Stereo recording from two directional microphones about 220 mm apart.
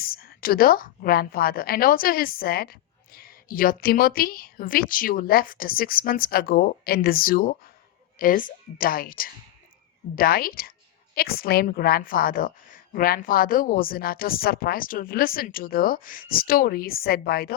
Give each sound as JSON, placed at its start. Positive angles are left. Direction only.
{"t": 0.0, "sound": "a woman's voice", "side_deg": 45}